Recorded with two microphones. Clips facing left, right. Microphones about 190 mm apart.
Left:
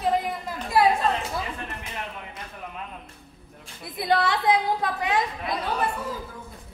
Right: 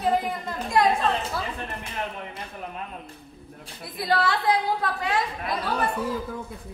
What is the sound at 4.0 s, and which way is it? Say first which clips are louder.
A woman's voice: left 1 dB; 20° left (ahead or behind).